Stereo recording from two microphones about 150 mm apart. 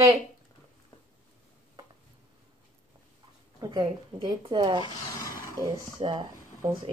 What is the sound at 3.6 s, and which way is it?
Speech, 30° right (ahead or behind).